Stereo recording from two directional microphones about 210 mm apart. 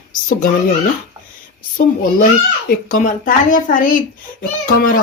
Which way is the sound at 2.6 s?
40° left (ahead or behind).